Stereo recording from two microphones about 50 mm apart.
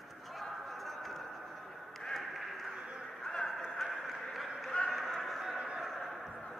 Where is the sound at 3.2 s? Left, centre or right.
Centre.